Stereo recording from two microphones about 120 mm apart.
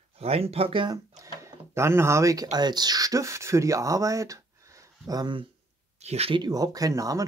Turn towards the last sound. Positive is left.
turn(degrees=-30)  # may be behind; listen again after turning